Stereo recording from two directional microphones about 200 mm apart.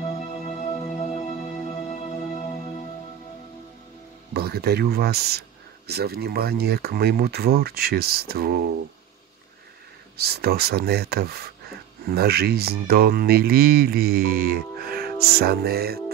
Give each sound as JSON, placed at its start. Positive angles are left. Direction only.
{"t": 0.0, "sound": "music", "side_deg": 30}
{"t": 4.3, "sound": "speech", "side_deg": -50}
{"t": 10.1, "sound": "speech", "side_deg": -50}